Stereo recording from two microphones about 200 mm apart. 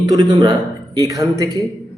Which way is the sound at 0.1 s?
20° right (ahead or behind).